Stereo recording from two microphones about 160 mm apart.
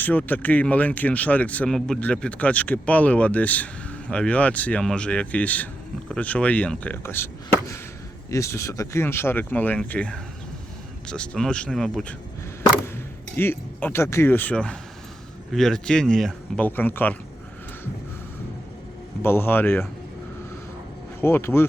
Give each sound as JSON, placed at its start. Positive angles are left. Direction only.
{"t": 0.0, "sound": "speech", "side_deg": 10}
{"t": 8.3, "sound": "speech", "side_deg": 20}
{"t": 13.3, "sound": "speech", "side_deg": 15}
{"t": 19.2, "sound": "speech", "side_deg": 15}
{"t": 21.2, "sound": "speech", "side_deg": 15}